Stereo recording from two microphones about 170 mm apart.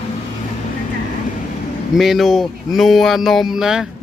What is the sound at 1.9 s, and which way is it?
Speech, centre (ahead or behind).